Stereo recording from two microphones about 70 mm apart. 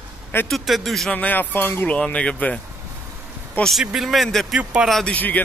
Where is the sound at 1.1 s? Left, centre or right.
Left.